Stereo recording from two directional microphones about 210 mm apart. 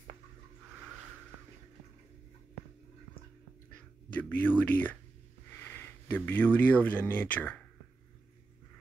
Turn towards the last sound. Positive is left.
turn(degrees=10)  # may be behind; listen again after turning